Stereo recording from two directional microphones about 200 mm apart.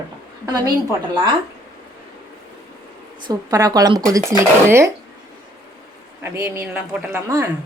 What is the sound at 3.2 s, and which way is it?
Speech, 20° right (ahead or behind).